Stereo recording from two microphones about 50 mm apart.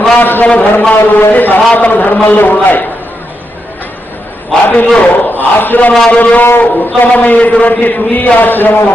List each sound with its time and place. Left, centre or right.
0.2 s a sound: left
0.4 s a man's voice: left
4.6 s a man's voice: left